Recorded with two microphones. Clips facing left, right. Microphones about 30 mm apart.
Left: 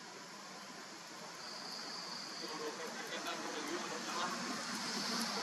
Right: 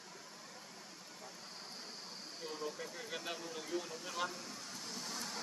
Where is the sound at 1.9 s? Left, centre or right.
Left.